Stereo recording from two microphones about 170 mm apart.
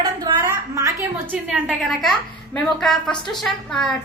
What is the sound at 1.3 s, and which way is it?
A woman's voice, centre (ahead or behind).